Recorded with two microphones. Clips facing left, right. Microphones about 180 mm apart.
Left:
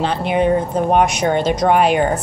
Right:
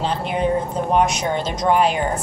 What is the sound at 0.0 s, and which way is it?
A woman's voice, 70° left (ahead or behind).